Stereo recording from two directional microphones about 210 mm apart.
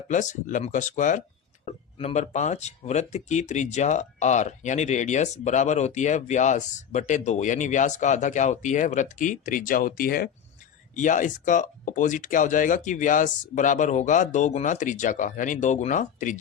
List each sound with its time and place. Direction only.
0.1 s speech: 35° left (ahead or behind)